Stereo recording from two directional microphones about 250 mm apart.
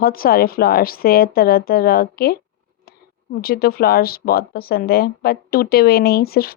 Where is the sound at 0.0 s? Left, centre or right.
Left.